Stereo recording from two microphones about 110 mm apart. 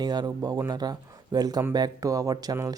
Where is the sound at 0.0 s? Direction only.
40° right (ahead or behind).